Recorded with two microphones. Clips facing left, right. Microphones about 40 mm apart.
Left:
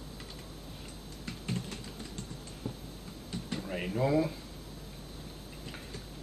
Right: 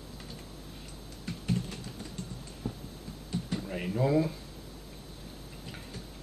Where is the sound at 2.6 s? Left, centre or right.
Left.